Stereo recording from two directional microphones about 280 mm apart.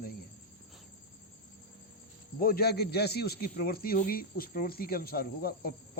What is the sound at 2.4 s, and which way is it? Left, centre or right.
A man's voice, left.